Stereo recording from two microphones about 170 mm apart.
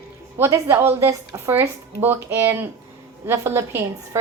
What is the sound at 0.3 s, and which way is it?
A woman's voice, 15° right (ahead or behind).